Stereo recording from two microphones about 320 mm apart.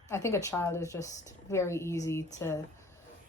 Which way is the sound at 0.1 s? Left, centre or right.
Centre.